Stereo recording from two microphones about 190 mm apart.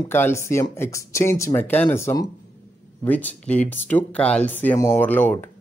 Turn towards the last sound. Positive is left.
turn(degrees=10)  # may be behind; listen again after turning